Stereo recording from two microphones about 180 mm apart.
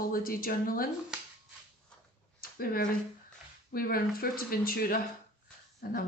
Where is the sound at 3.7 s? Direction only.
55° left (ahead or behind).